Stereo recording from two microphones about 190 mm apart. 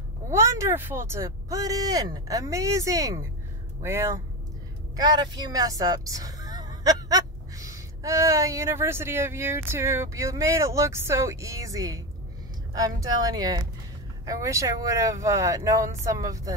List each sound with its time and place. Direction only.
0.3 s speech: 15° right (ahead or behind)